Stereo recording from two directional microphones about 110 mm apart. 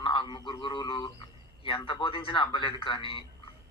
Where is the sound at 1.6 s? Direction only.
50° left (ahead or behind).